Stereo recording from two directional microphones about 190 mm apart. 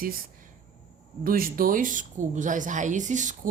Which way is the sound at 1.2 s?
50° right (ahead or behind).